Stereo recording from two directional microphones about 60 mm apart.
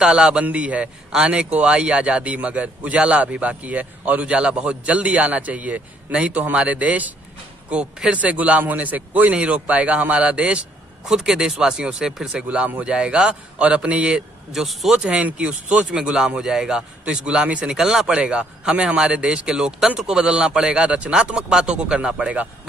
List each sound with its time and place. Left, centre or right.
0.0 s a man's voice: centre
15.0 s a man's voice: centre